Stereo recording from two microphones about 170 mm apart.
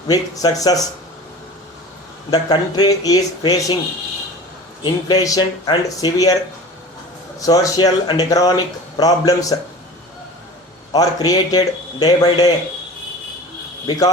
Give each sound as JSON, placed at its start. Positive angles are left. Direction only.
{"t": 0.1, "sound": "speech", "side_deg": 20}
{"t": 2.3, "sound": "speech", "side_deg": 25}
{"t": 4.8, "sound": "speech", "side_deg": 25}
{"t": 7.3, "sound": "speech", "side_deg": 20}
{"t": 10.9, "sound": "speech", "side_deg": 20}
{"t": 13.8, "sound": "speech", "side_deg": 20}